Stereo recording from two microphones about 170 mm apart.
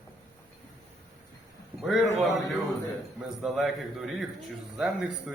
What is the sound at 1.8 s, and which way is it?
Speech, 5° right (ahead or behind).